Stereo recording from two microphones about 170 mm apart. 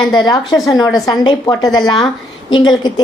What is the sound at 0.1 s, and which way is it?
A woman's voice, 25° left (ahead or behind).